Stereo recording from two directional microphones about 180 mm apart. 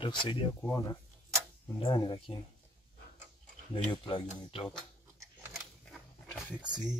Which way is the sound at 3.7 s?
25° left (ahead or behind).